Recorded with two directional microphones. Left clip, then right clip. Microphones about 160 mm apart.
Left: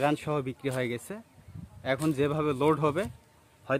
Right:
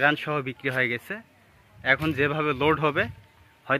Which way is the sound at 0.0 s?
20° left (ahead or behind).